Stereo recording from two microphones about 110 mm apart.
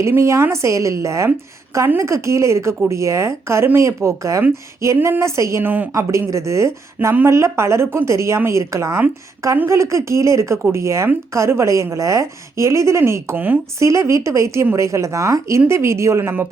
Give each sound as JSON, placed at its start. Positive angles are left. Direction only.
{"t": 0.0, "sound": "a woman's voice", "side_deg": -25}